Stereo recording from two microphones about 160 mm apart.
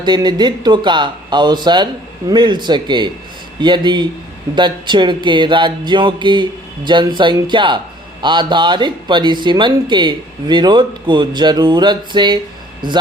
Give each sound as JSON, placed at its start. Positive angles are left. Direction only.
{"t": 0.0, "sound": "speech", "side_deg": -25}